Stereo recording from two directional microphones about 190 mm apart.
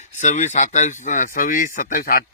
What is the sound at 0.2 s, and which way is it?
Speech, 40° left (ahead or behind).